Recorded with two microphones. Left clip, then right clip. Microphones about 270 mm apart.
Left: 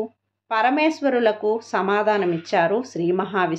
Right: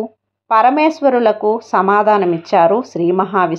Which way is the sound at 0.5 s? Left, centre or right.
Right.